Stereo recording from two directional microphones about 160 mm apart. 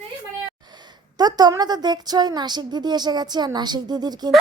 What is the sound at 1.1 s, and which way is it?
A woman's voice, 25° right (ahead or behind).